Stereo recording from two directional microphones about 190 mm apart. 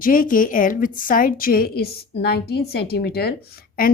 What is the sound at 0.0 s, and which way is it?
A woman's voice, 45° left (ahead or behind).